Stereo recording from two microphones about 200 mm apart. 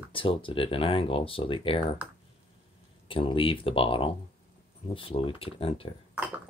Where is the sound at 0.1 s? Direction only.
25° left (ahead or behind).